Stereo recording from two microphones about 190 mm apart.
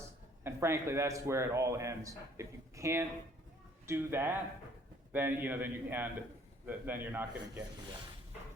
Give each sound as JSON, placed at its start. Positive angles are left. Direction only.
{"t": 0.4, "sound": "a man's voice", "side_deg": -15}